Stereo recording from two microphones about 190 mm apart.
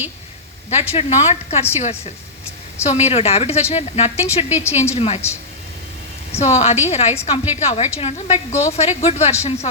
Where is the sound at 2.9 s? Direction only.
35° left (ahead or behind).